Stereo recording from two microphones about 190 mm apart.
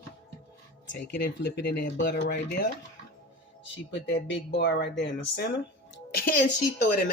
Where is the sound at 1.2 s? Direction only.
60° left (ahead or behind).